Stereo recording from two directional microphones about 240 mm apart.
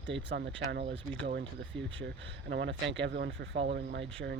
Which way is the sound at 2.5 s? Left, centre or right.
Right.